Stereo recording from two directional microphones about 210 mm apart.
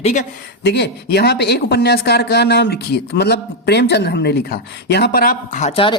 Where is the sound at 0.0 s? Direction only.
35° left (ahead or behind).